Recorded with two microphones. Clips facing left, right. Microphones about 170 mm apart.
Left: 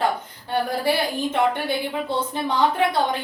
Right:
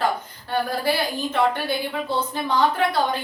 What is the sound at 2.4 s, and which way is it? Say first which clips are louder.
Speech: even; 20° left (ahead or behind).